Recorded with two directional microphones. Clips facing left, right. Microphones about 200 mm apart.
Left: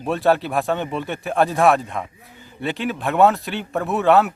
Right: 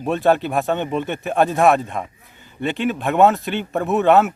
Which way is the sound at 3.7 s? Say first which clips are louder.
Right 3 dB; 15° right (ahead or behind).